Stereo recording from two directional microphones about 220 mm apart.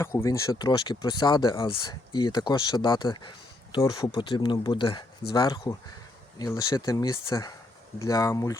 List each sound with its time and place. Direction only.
0.0 s speech: 15° left (ahead or behind)